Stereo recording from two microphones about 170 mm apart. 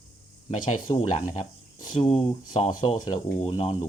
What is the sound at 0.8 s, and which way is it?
Speech, 45° left (ahead or behind).